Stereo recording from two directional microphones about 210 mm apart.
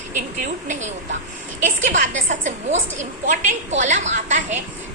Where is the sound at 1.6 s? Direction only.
35° right (ahead or behind).